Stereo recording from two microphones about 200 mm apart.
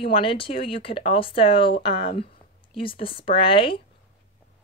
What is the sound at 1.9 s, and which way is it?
Speech, 50° left (ahead or behind).